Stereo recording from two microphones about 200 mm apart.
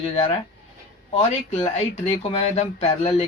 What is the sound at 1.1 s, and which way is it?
Speech, 30° left (ahead or behind).